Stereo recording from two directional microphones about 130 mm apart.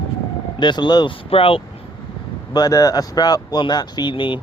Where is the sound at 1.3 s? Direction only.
45° left (ahead or behind).